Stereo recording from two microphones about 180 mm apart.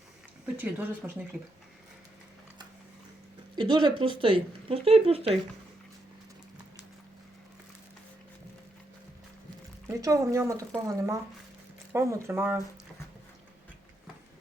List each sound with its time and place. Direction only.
0.4 s speech: 10° right (ahead or behind)
3.5 s speech: 25° right (ahead or behind)
9.8 s speech: 15° right (ahead or behind)